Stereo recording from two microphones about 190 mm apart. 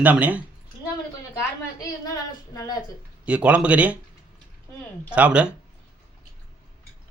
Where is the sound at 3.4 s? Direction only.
5° right (ahead or behind).